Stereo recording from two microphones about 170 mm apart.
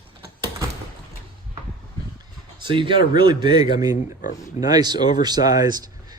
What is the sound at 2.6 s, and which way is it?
Speech, 30° right (ahead or behind).